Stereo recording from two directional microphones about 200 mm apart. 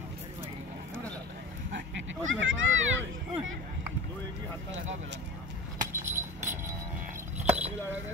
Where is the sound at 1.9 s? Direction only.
75° right (ahead or behind).